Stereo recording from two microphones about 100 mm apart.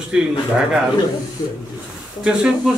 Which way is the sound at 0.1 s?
10° right (ahead or behind).